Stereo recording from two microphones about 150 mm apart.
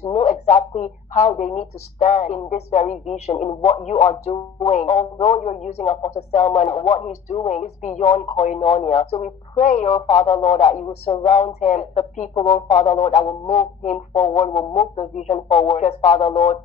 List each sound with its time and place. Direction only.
0.0 s a man's voice: 45° left (ahead or behind)